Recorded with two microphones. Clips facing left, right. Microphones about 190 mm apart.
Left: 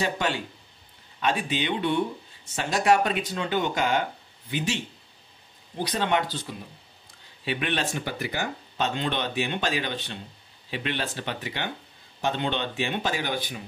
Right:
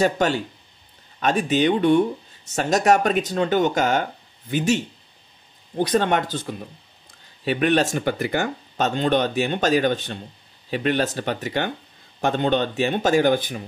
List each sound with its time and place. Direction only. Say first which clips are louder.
0.0 s speech: right 7 dB; 40° right (ahead or behind)